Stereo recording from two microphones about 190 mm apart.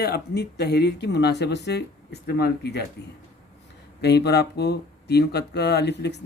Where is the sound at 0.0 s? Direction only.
60° left (ahead or behind).